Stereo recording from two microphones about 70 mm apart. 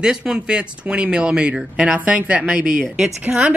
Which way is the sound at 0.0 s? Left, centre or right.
Centre.